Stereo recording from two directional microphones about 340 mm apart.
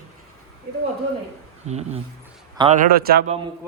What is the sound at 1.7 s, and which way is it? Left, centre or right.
Speech, centre.